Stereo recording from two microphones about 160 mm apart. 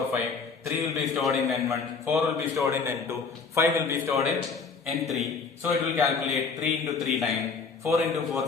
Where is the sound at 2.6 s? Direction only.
15° right (ahead or behind).